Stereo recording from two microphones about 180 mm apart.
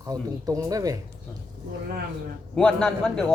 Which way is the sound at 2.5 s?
5° left (ahead or behind).